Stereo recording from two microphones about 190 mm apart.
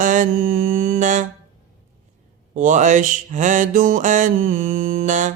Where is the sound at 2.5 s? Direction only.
40° right (ahead or behind).